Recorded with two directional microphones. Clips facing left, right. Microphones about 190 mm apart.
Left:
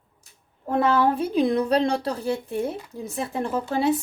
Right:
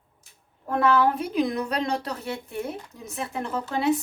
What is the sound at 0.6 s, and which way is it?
A woman's voice, 25° left (ahead or behind).